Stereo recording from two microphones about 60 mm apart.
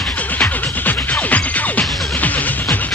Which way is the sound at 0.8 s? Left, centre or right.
Left.